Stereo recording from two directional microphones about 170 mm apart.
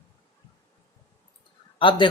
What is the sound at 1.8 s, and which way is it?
Speech, 30° left (ahead or behind).